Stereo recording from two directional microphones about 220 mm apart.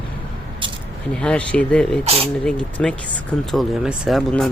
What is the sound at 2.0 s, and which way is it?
Speech, 25° right (ahead or behind).